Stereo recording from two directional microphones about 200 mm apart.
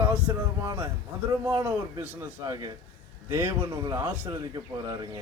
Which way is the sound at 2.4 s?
20° right (ahead or behind).